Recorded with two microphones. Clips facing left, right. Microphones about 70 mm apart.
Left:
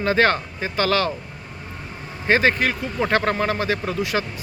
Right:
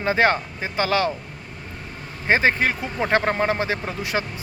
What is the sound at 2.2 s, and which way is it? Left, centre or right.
Speech, centre.